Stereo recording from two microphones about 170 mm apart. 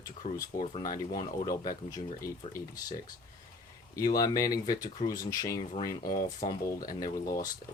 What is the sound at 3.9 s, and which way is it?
Speech, 20° left (ahead or behind).